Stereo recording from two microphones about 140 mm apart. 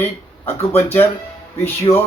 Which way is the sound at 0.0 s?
15° left (ahead or behind).